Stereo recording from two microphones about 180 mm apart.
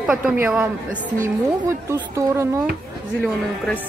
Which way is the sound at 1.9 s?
15° right (ahead or behind).